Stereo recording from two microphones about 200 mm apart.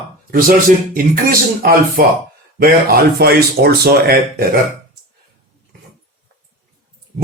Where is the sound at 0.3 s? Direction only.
45° right (ahead or behind).